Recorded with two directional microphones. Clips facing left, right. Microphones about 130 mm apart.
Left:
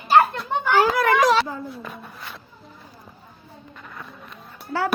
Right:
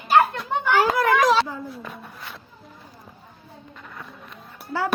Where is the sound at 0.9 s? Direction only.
70° left (ahead or behind).